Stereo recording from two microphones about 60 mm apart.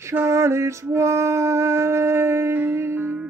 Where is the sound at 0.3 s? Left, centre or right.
Right.